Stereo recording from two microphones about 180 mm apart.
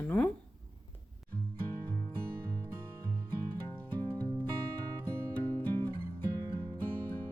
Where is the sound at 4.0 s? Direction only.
20° right (ahead or behind).